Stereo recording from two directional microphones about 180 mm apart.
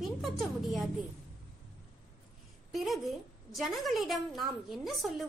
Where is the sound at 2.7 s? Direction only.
Centre (ahead or behind).